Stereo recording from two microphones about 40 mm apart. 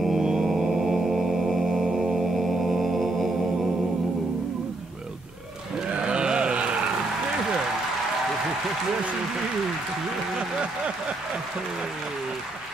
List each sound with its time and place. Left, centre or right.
0.1 s mantra: centre
1.0 s music: centre
1.9 s music: centre
2.3 s music: centre
5.9 s mantra: right